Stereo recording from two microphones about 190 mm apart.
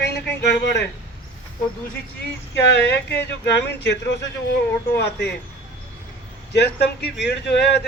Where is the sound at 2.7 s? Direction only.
60° left (ahead or behind).